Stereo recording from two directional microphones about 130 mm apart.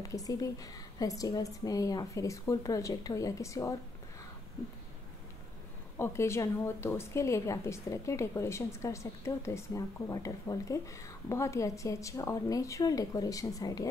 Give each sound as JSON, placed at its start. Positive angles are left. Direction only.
{"t": 0.0, "sound": "a woman's voice", "side_deg": 25}
{"t": 5.9, "sound": "a woman's voice", "side_deg": 20}